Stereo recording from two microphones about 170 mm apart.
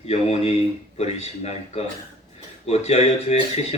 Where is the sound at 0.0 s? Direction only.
35° left (ahead or behind).